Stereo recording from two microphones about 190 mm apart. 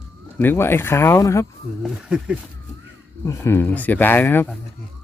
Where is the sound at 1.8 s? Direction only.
Centre (ahead or behind).